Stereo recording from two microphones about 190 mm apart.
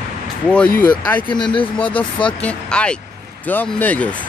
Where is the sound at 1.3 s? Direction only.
25° left (ahead or behind).